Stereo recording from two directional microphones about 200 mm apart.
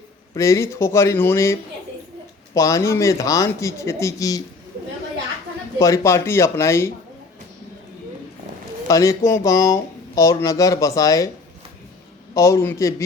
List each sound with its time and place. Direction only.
0.3 s speech: 15° left (ahead or behind)
2.6 s speech: 15° left (ahead or behind)
5.8 s speech: 15° left (ahead or behind)
8.9 s speech: 15° left (ahead or behind)
12.3 s speech: 15° left (ahead or behind)